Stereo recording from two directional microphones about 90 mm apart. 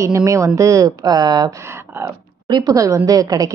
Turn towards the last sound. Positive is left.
turn(degrees=-45)  # may be behind; listen again after turning